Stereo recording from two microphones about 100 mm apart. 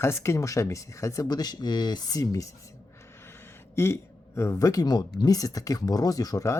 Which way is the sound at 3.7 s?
25° left (ahead or behind).